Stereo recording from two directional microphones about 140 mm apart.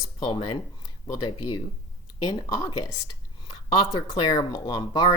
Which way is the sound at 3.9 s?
25° left (ahead or behind).